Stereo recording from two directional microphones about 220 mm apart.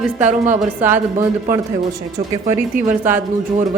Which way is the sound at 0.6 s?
10° right (ahead or behind).